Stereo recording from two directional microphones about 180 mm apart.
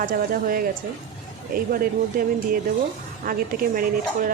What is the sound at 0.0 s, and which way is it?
Speech, 50° right (ahead or behind).